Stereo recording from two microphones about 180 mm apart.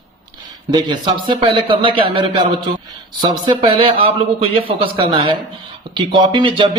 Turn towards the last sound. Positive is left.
turn(degrees=-30)  # may be behind; listen again after turning